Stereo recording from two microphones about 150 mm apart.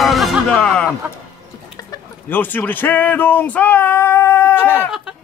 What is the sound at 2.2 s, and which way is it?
Speech, 10° left (ahead or behind).